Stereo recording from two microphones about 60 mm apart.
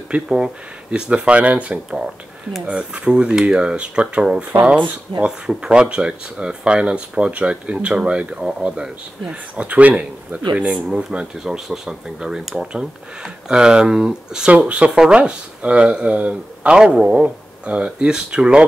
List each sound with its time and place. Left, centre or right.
0.1 s speech: centre
5.2 s speech: centre
10.5 s speech: centre